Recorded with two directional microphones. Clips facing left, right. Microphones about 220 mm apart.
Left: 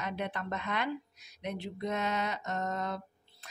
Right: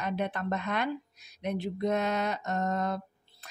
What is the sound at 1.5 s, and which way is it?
Mantra, 40° right (ahead or behind).